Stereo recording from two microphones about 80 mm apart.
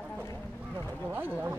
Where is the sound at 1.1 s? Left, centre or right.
Right.